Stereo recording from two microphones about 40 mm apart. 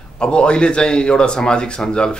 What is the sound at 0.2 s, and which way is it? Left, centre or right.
Speech, left.